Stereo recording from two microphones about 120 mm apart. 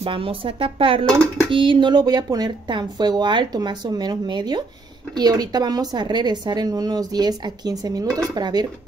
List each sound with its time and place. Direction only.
0.0 s a woman's voice: 45° right (ahead or behind)